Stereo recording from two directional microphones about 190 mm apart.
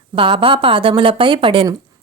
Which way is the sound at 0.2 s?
30° right (ahead or behind).